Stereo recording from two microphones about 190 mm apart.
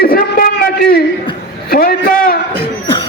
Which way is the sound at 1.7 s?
50° left (ahead or behind).